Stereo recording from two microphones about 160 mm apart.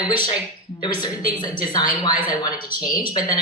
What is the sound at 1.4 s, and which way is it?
Speech, 25° left (ahead or behind).